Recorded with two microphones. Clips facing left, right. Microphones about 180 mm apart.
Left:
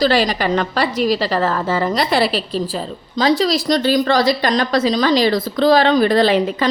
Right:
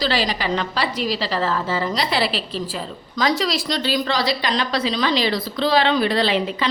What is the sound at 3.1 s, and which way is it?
A woman's voice, 30° left (ahead or behind).